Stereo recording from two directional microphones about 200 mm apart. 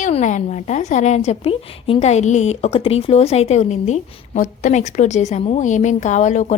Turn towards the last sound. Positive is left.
turn(degrees=35)  # may be behind; listen again after turning